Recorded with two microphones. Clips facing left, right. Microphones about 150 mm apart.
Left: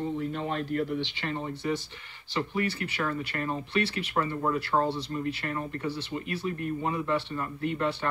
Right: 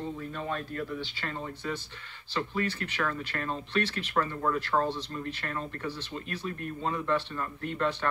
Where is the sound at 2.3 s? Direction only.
15° left (ahead or behind).